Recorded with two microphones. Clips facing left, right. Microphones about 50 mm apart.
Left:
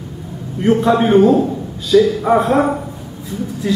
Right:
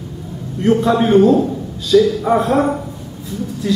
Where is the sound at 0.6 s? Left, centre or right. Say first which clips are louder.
Left 1 dB; centre.